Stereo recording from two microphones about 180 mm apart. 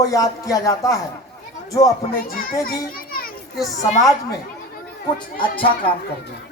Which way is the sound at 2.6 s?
55° left (ahead or behind).